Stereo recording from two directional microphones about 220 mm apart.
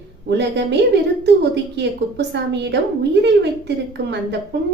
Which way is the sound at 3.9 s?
50° right (ahead or behind).